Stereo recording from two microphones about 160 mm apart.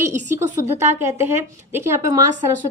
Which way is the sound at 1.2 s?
15° right (ahead or behind).